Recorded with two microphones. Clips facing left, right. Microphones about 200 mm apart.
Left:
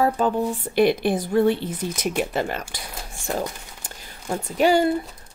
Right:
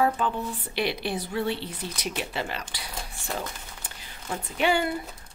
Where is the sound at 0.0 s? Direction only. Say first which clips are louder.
Left 5 dB; 45° left (ahead or behind).